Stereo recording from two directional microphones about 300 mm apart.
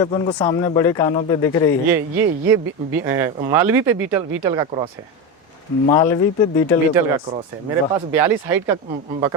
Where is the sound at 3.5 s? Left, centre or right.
Centre.